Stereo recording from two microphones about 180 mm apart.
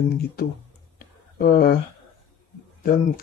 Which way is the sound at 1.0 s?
55° left (ahead or behind).